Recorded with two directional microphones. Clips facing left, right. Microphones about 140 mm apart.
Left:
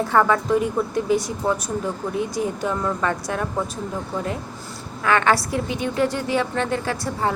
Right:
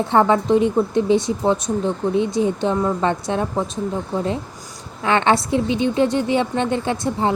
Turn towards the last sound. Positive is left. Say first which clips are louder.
# right 4 dB
turn(degrees=-20)  # may be behind; listen again after turning